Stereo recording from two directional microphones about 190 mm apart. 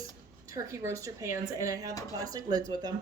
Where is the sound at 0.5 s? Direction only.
15° right (ahead or behind).